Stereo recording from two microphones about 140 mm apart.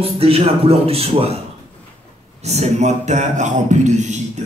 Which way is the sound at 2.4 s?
50° right (ahead or behind).